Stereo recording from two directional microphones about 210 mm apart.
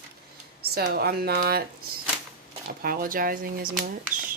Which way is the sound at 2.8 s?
45° right (ahead or behind).